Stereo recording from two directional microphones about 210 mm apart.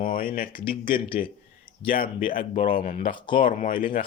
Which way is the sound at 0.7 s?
25° left (ahead or behind).